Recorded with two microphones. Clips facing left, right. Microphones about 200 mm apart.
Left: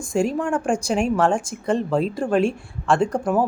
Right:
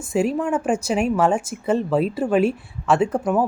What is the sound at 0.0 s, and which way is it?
Speech, 5° right (ahead or behind).